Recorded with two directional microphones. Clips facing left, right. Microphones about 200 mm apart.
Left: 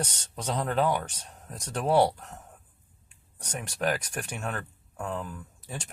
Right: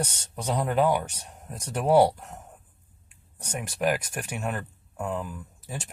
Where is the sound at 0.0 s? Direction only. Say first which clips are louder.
Right 2 dB; 10° right (ahead or behind).